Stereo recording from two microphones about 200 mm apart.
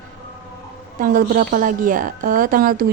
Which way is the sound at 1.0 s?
45° right (ahead or behind).